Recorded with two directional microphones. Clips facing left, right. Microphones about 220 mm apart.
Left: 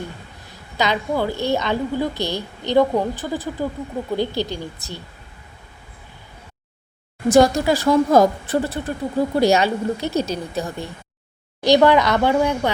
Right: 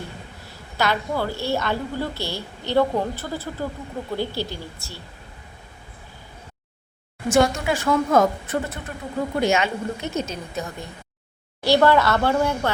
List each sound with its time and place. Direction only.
0.8 s a woman's voice: 15° left (ahead or behind)
7.3 s speech: 35° left (ahead or behind)
11.6 s a woman's voice: 15° left (ahead or behind)